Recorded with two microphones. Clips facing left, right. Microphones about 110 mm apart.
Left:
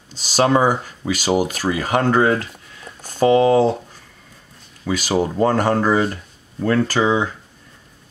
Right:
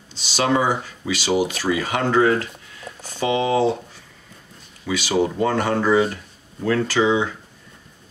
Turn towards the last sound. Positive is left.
turn(degrees=40)  # may be behind; listen again after turning